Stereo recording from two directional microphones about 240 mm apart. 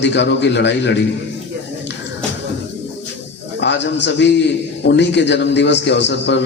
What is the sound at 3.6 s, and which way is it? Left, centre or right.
A man's voice, left.